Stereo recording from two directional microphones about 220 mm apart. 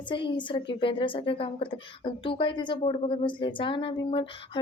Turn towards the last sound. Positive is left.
turn(degrees=25)  # may be behind; listen again after turning